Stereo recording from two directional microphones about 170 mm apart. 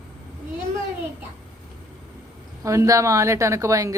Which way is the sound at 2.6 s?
15° right (ahead or behind).